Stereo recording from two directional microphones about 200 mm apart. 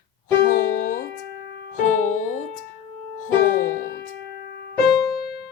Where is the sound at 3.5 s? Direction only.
40° left (ahead or behind).